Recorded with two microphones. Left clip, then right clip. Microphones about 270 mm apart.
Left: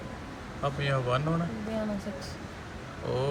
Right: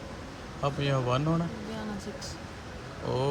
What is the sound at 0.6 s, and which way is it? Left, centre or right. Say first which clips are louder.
Speech: right 1 dB; centre.